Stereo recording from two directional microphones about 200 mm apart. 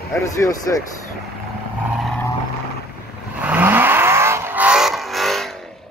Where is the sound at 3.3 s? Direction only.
10° right (ahead or behind).